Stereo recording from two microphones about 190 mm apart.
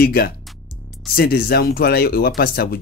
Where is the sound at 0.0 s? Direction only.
55° left (ahead or behind).